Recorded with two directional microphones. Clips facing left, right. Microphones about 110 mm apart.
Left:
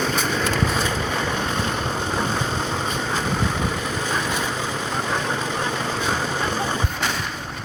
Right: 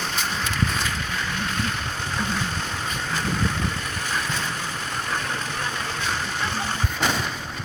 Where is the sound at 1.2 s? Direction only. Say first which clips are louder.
Left 4 dB; 25° left (ahead or behind).